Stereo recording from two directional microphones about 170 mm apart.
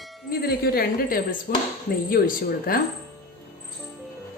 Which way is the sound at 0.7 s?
60° left (ahead or behind).